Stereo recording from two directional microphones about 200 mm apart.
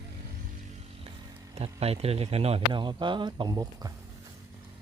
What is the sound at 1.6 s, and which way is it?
Speech, 30° right (ahead or behind).